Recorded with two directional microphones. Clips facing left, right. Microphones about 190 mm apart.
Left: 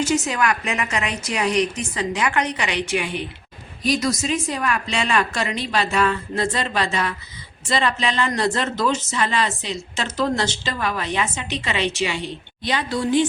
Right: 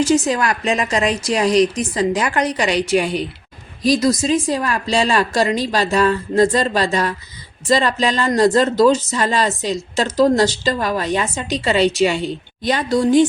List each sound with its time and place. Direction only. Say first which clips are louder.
0.0 s speech: right 5 dB; 35° right (ahead or behind)